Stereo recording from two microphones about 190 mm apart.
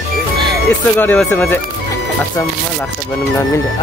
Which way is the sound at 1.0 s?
10° left (ahead or behind).